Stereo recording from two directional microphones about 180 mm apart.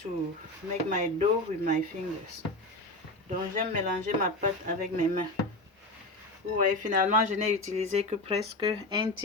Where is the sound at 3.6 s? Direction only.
50° right (ahead or behind).